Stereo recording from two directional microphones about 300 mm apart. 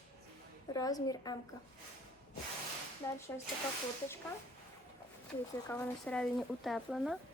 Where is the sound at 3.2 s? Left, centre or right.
Centre.